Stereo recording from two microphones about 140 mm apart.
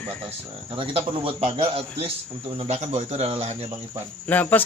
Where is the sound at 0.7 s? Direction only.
40° right (ahead or behind).